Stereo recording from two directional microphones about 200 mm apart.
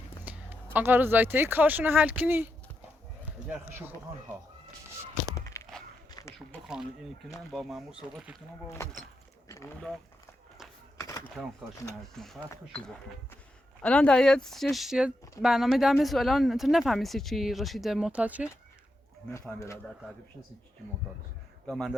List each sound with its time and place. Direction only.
0.3 s speech: 10° right (ahead or behind)
3.5 s speech: 10° right (ahead or behind)
5.3 s a sound: 15° left (ahead or behind)
7.5 s speech: centre (ahead or behind)
8.8 s speech: 15° left (ahead or behind)
11.4 s speech: 5° right (ahead or behind)
13.8 s speech: 5° left (ahead or behind)
19.3 s speech: 15° left (ahead or behind)
21.7 s speech: centre (ahead or behind)